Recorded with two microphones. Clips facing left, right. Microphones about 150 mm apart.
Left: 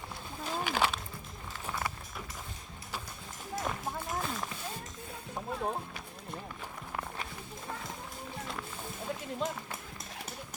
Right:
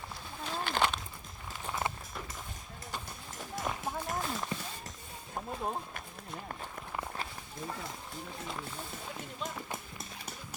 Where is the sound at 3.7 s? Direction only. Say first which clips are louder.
Right 2 dB; centre (ahead or behind).